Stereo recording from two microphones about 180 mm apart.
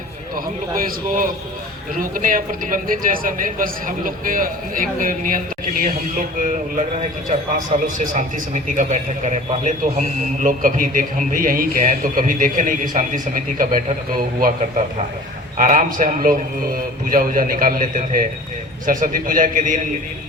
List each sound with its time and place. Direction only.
0.3 s a man's voice: 50° right (ahead or behind)
15.5 s a man's voice: 45° right (ahead or behind)